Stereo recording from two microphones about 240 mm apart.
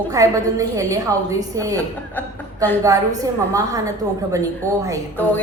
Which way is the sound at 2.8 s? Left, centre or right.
Centre.